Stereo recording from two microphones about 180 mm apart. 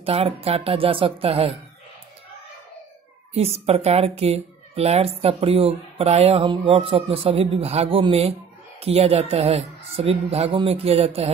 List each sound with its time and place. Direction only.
0.0 s speech: 35° right (ahead or behind)
3.3 s speech: 35° right (ahead or behind)